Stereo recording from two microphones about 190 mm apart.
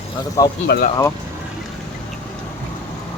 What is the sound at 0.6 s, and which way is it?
Speech, 60° left (ahead or behind).